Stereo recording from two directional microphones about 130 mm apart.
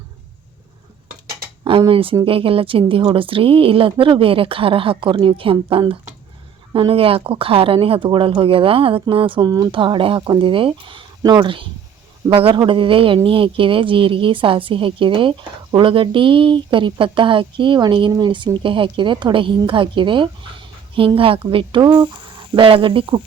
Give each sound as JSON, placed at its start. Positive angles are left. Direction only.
{"t": 1.9, "sound": "speech", "side_deg": -45}
{"t": 9.5, "sound": "a woman's voice", "side_deg": -25}
{"t": 9.7, "sound": "a woman's voice", "side_deg": -40}